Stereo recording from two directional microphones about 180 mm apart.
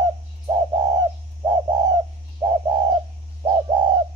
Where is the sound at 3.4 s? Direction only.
25° right (ahead or behind).